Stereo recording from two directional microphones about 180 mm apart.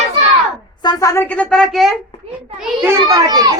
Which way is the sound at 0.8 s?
20° left (ahead or behind).